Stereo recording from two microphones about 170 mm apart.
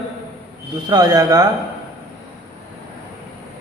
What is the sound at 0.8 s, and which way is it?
Speech, 25° right (ahead or behind).